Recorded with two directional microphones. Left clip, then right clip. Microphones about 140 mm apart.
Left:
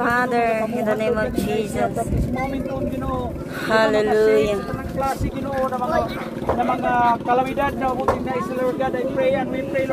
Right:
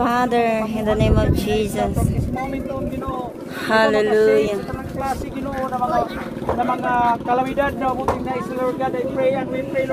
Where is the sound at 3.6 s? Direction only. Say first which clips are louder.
Right 1 dB; 50° right (ahead or behind); by 4.6 s 30° right (ahead or behind).